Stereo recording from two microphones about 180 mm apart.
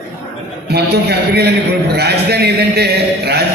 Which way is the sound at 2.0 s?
65° right (ahead or behind).